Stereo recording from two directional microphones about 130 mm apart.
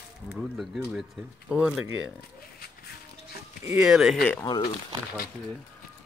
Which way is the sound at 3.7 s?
5° right (ahead or behind).